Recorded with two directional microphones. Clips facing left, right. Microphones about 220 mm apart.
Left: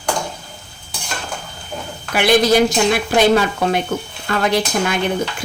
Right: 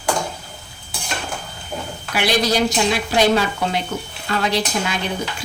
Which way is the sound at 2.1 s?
50° left (ahead or behind).